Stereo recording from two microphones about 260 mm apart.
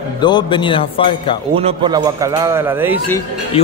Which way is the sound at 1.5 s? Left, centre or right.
Centre.